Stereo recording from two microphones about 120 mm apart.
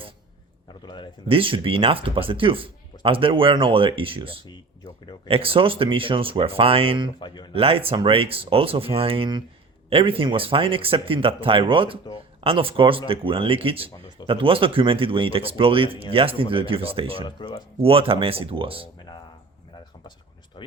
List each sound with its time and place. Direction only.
0.7 s speech: 40° left (ahead or behind)
1.3 s speech: 45° right (ahead or behind)
7.2 s speech: 40° left (ahead or behind)
7.5 s speech: 55° right (ahead or behind)
17.2 s speech: 40° left (ahead or behind)
17.7 s speech: 50° right (ahead or behind)
20.6 s a sound: 40° left (ahead or behind)